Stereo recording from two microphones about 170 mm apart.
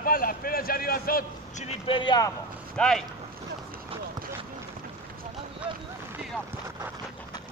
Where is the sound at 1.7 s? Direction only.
30° left (ahead or behind).